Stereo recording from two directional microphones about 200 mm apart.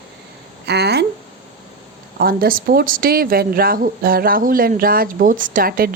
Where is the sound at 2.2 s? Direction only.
50° right (ahead or behind).